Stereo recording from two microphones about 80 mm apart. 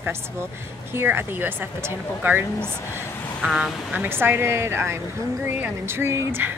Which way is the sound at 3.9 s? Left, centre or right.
Right.